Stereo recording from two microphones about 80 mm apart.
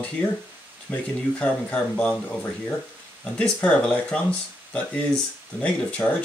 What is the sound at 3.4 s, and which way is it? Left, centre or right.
Speech, centre.